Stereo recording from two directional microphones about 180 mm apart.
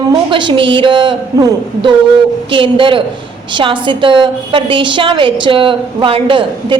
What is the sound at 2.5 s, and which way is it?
A woman's voice, 30° right (ahead or behind).